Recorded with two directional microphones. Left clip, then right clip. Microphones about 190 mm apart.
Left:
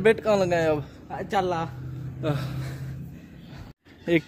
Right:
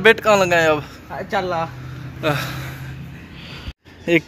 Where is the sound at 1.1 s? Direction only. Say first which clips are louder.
Right 4 dB; 40° left (ahead or behind).